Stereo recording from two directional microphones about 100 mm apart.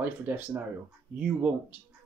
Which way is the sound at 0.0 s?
20° right (ahead or behind).